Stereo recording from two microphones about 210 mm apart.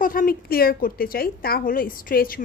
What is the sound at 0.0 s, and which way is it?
A woman's voice, 40° left (ahead or behind).